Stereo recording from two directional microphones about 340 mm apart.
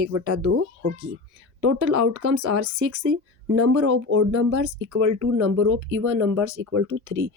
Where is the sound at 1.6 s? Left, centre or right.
Right.